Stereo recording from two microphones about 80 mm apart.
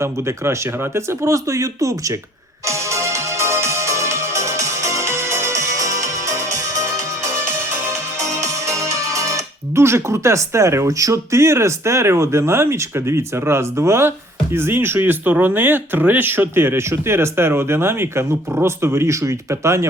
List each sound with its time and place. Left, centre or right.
0.0 s speech: right
2.6 s music: right
8.3 s speech: right